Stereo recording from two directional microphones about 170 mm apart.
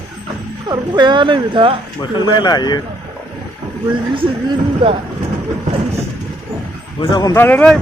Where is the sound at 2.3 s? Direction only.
25° left (ahead or behind).